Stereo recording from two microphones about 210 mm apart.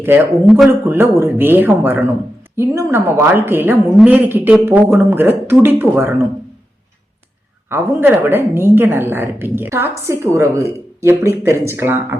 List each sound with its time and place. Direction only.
0.0 s a woman's voice: 10° right (ahead or behind)
7.7 s a woman's voice: 10° right (ahead or behind)